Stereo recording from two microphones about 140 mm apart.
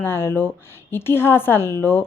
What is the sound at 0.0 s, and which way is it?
A woman's voice, 15° left (ahead or behind).